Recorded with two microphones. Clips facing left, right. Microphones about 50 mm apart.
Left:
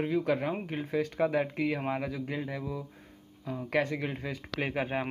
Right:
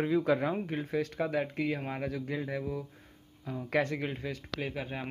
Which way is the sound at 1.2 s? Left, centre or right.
Left.